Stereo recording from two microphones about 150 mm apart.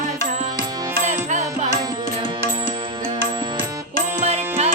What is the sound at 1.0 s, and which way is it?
Music, 55° right (ahead or behind).